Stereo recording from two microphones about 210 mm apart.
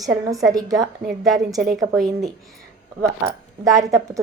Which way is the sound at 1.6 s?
Centre (ahead or behind).